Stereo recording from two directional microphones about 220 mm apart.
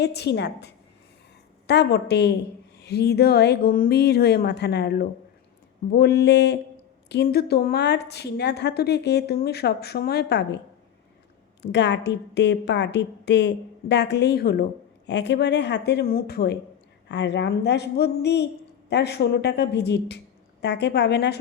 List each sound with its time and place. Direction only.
0.0 s a woman's voice: 50° left (ahead or behind)
11.6 s a woman's voice: 50° left (ahead or behind)